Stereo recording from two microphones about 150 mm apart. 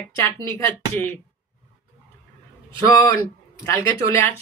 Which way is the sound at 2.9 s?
15° left (ahead or behind).